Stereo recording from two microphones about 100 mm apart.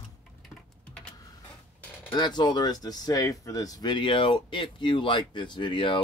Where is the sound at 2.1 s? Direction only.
45° left (ahead or behind).